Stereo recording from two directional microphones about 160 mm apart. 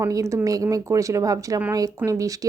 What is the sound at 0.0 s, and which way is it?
Speech, 20° right (ahead or behind).